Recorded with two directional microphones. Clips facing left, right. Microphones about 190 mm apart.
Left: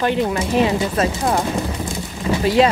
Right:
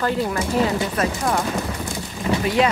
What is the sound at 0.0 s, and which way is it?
Speech, 20° left (ahead or behind).